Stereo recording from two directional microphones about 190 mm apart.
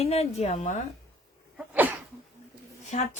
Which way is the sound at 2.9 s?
40° left (ahead or behind).